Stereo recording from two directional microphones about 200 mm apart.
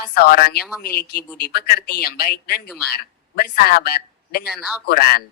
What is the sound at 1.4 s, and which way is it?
Speech, 50° left (ahead or behind).